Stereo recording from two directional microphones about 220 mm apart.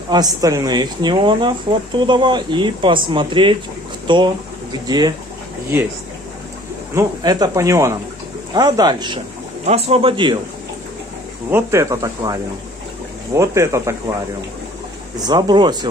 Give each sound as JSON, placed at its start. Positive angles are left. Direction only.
{"t": 0.1, "sound": "speech", "side_deg": -15}
{"t": 6.9, "sound": "speech", "side_deg": -15}
{"t": 11.5, "sound": "speech", "side_deg": -15}
{"t": 15.1, "sound": "speech", "side_deg": -20}